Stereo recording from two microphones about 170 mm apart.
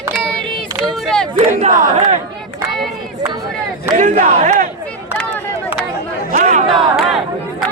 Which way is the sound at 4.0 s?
50° right (ahead or behind).